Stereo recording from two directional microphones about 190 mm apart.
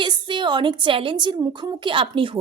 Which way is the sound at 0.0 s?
25° right (ahead or behind).